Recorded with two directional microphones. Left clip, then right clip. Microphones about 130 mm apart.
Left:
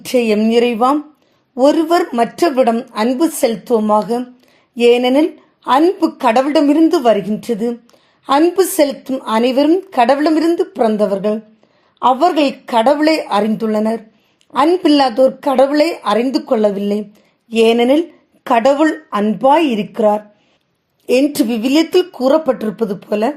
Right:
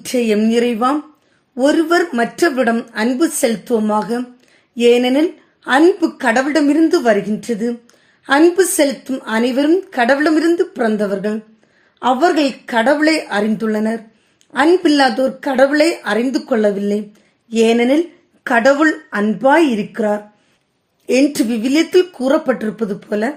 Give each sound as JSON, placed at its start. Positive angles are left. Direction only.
{"t": 0.0, "sound": "speech", "side_deg": 30}